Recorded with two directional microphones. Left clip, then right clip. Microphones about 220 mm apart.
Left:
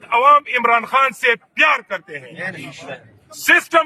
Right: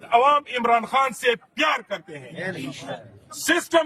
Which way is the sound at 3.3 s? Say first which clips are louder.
Left 8 dB; centre (ahead or behind).